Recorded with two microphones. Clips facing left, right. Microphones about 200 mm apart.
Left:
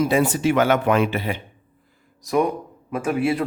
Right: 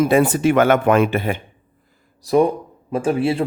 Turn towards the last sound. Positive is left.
turn(degrees=-30)  # may be behind; listen again after turning